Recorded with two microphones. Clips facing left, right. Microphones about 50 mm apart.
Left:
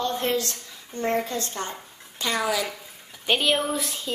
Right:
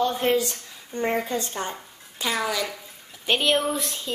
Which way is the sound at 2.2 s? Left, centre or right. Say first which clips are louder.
Left 1 dB; centre.